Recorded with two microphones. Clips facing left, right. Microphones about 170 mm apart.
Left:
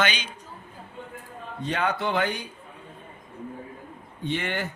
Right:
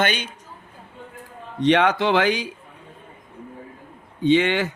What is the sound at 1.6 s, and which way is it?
Speech, 85° right.